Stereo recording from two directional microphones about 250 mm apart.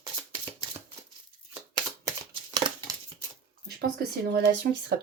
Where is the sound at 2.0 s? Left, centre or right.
Centre.